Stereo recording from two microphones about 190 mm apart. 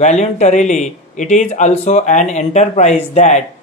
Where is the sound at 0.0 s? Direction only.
35° left (ahead or behind).